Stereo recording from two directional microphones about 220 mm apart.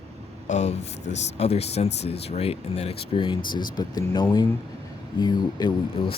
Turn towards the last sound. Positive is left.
turn(degrees=20)  # may be behind; listen again after turning